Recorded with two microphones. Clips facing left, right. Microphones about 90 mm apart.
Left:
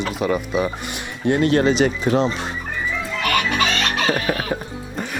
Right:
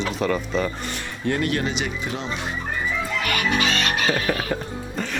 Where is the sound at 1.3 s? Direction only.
25° left (ahead or behind).